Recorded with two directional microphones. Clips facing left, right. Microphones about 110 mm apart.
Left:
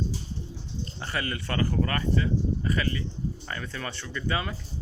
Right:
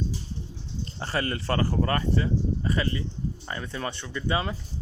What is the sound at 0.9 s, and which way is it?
Speech, 35° right (ahead or behind).